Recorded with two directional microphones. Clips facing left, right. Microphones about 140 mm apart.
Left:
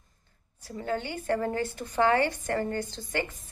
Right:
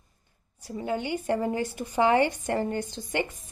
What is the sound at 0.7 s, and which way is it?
A woman's voice, 15° right (ahead or behind).